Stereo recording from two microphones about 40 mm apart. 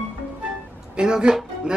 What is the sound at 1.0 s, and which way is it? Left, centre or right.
Speech, right.